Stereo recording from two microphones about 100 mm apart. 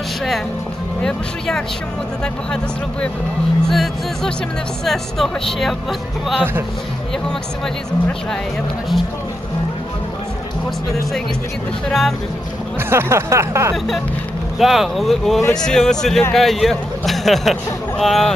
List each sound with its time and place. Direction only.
1.0 s speech: 5° left (ahead or behind)
3.7 s speech: centre (ahead or behind)
11.9 s speech: centre (ahead or behind)
12.9 s music: 25° right (ahead or behind)
14.6 s speech: centre (ahead or behind)